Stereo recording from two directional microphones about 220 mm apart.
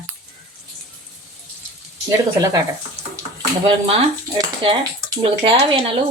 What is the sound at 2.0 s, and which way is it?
Speech, 15° right (ahead or behind).